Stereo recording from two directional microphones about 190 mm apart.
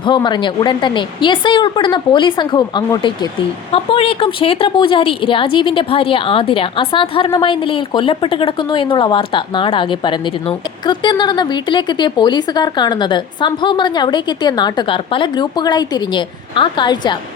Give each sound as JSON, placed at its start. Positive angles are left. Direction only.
{"t": 0.0, "sound": "a woman's voice", "side_deg": 25}